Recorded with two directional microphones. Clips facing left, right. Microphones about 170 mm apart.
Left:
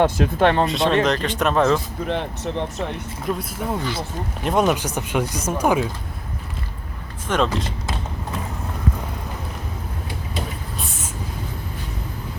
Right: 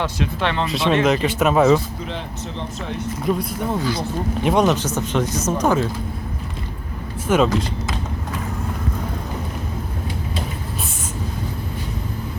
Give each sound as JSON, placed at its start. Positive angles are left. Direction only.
{"t": 0.0, "sound": "speech", "side_deg": 45}
{"t": 0.7, "sound": "speech", "side_deg": 0}
{"t": 2.0, "sound": "speech", "side_deg": 60}
{"t": 3.2, "sound": "speech", "side_deg": 0}
{"t": 7.3, "sound": "speech", "side_deg": -5}